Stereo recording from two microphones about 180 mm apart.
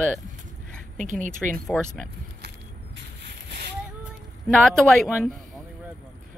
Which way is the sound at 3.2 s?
65° right (ahead or behind).